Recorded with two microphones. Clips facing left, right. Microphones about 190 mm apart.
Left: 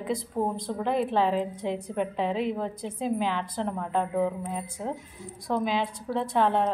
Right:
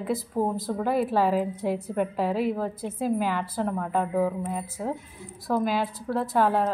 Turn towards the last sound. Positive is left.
turn(degrees=-5)  # may be behind; listen again after turning